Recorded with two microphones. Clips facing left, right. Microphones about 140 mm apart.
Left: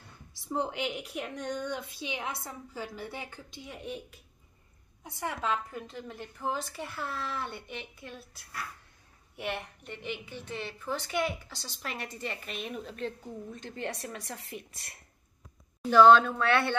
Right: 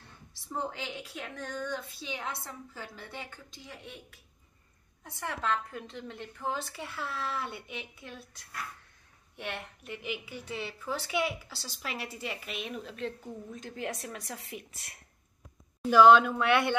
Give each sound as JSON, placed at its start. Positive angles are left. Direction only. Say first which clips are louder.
{"t": 0.4, "sound": "a woman's voice", "louder": "left 4 dB", "side_deg": 15}
{"t": 9.8, "sound": "a woman's voice", "louder": "right 2 dB", "side_deg": -5}